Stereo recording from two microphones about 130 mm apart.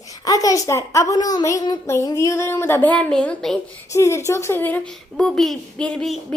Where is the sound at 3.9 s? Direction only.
20° left (ahead or behind); by 6.3 s 5° left (ahead or behind).